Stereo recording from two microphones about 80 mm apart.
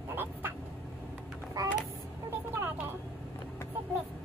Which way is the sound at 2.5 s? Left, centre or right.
Right.